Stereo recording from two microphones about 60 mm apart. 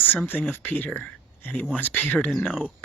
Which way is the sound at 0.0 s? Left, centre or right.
Left.